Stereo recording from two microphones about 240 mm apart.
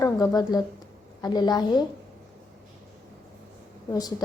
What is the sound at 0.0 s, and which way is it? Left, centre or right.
A woman's voice, centre.